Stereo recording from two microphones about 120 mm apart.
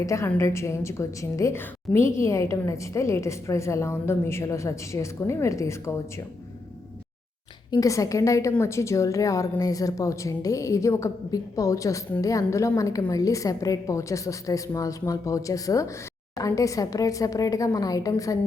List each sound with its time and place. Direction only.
0.0 s a woman's voice: 25° left (ahead or behind)
7.7 s a woman's voice: 30° left (ahead or behind)